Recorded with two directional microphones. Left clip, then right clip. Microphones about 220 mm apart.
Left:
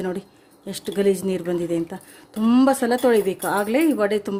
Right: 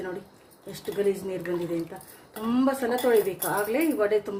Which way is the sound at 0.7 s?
45° left (ahead or behind).